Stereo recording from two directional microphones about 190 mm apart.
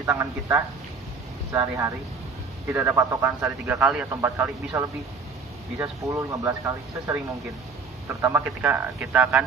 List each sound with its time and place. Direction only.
0.0 s a man's voice: 15° right (ahead or behind)
6.0 s a man's voice: 15° right (ahead or behind)
8.3 s a man's voice: 10° right (ahead or behind)